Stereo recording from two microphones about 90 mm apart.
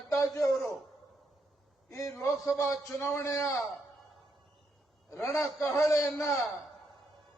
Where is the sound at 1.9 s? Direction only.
35° left (ahead or behind).